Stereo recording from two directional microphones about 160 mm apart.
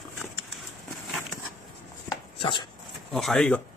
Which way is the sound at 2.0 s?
30° left (ahead or behind).